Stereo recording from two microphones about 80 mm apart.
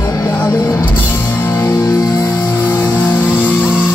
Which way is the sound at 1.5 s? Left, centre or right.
Left.